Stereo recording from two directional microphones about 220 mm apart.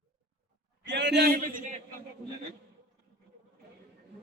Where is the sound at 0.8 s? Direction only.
50° right (ahead or behind).